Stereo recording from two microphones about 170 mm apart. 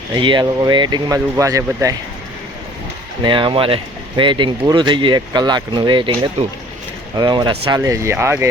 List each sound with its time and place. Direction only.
0.1 s speech: 25° right (ahead or behind)
3.2 s speech: 30° right (ahead or behind)
7.2 s speech: 25° right (ahead or behind)